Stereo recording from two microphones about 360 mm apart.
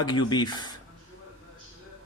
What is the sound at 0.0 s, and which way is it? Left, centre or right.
Speech, centre.